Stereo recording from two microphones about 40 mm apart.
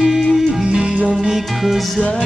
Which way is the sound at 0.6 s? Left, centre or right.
Right.